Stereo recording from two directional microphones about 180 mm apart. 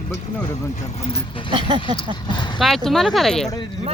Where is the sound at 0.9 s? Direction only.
35° left (ahead or behind).